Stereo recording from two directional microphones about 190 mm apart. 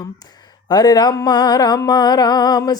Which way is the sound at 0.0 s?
20° left (ahead or behind).